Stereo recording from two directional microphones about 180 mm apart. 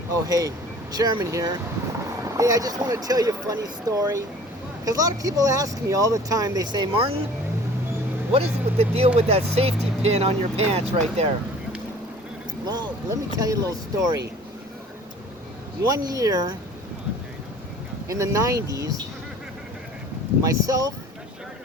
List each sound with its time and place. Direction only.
0.3 s speech: 20° right (ahead or behind)
8.3 s speech: 35° right (ahead or behind)
12.6 s speech: 20° right (ahead or behind)
15.9 s speech: 20° right (ahead or behind)
18.1 s speech: 15° right (ahead or behind)
20.4 s speech: 20° right (ahead or behind)